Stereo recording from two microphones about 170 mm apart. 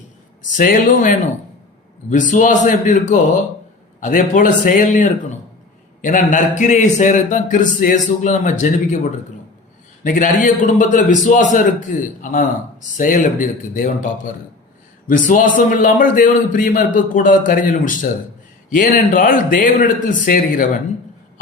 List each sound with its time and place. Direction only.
0.5 s a man's voice: 50° left (ahead or behind)